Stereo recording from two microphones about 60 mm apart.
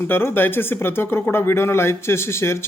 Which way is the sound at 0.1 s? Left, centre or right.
Left.